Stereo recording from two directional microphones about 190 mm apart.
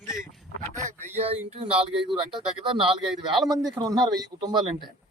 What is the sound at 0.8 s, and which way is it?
Speech, 40° right (ahead or behind).